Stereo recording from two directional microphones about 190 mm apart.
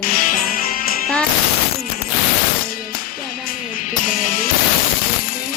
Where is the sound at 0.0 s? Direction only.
45° left (ahead or behind).